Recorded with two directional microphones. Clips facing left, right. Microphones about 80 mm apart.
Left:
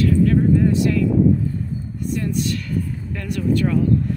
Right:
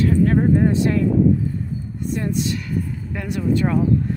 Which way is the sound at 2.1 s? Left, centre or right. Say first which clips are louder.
Even; right.